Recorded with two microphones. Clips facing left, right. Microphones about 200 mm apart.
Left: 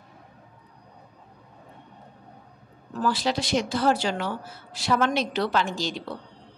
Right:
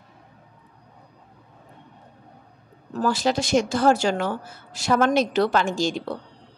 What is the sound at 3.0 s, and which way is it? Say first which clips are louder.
A woman's voice: right 3 dB; 45° right (ahead or behind).